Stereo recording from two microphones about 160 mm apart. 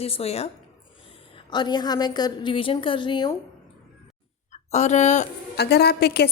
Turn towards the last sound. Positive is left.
turn(degrees=85)